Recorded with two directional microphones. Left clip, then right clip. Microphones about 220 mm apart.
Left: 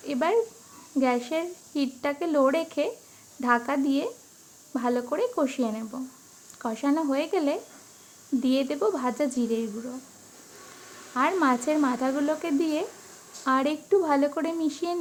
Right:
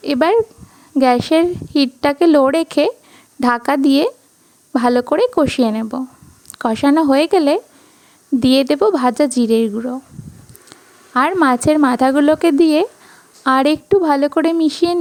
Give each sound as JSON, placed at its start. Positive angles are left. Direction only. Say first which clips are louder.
{"t": 0.0, "sound": "a woman's voice", "louder": "right 11 dB", "side_deg": -45}
{"t": 11.1, "sound": "a woman's voice", "louder": "right 10 dB", "side_deg": -45}